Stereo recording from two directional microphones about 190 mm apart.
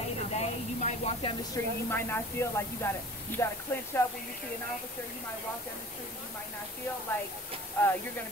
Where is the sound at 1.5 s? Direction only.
10° left (ahead or behind).